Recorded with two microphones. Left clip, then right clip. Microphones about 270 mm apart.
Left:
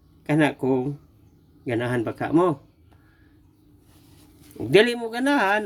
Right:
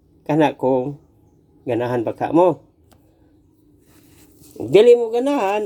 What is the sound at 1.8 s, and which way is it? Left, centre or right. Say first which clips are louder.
Speech: right 5 dB; centre.